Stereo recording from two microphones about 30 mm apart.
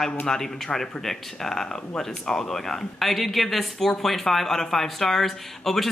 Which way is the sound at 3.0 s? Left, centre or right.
Centre.